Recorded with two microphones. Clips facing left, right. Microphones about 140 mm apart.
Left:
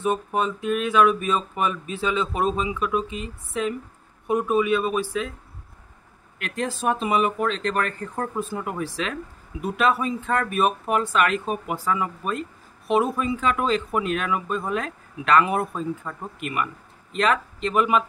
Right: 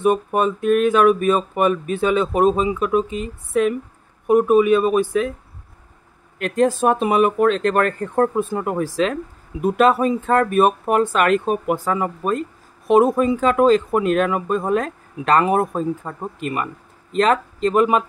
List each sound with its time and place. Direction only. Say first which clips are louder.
0.0 s speech: right 6 dB; 55° right (ahead or behind); by 3.3 s 40° right (ahead or behind)
4.3 s speech: right 7 dB; 50° right (ahead or behind)
6.3 s speech: right 11 dB; 40° right (ahead or behind)